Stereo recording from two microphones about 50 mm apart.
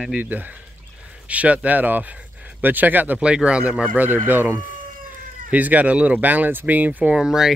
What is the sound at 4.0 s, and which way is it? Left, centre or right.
Speech, right.